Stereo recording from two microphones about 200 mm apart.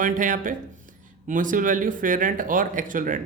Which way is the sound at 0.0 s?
40° right (ahead or behind).